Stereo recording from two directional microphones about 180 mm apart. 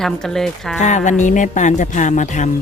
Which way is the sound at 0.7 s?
40° left (ahead or behind).